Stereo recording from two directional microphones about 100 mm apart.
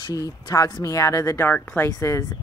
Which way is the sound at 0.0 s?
40° left (ahead or behind).